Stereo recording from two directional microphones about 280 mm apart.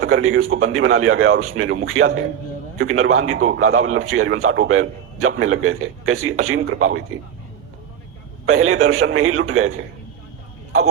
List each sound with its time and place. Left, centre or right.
0.0 s a man's voice: right
8.4 s a man's voice: right